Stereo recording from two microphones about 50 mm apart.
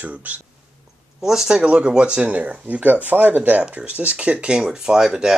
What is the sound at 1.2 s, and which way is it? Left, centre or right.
Speech, centre.